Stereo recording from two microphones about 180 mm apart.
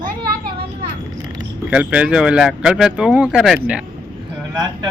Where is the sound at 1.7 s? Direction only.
5° right (ahead or behind).